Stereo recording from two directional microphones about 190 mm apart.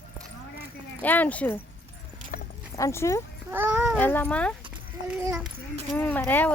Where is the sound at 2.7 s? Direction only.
15° left (ahead or behind).